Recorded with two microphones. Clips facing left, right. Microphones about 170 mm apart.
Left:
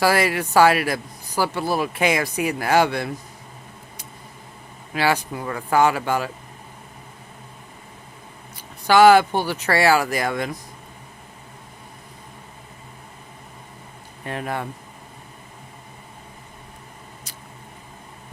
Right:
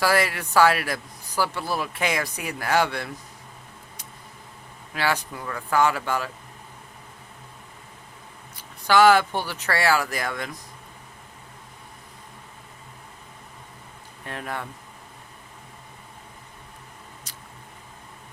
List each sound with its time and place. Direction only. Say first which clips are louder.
0.0 s speech: left 3 dB; 10° left (ahead or behind)
1.4 s speech: left 4 dB; 35° left (ahead or behind)
1.8 s speech: left 6 dB; 10° left (ahead or behind)
5.1 s speech: left 5 dB; 20° left (ahead or behind)
8.9 s speech: left 4 dB; 15° left (ahead or behind)
9.3 s speech: left 6 dB; 40° left (ahead or behind)
9.7 s speech: left 5 dB; 15° left (ahead or behind)
14.3 s speech: left 5 dB; 15° left (ahead or behind)